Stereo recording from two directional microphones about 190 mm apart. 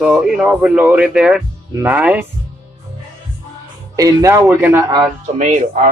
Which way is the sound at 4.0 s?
15° right (ahead or behind).